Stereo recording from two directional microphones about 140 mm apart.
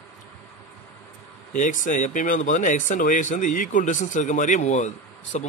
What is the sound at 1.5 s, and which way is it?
Speech, 70° left (ahead or behind).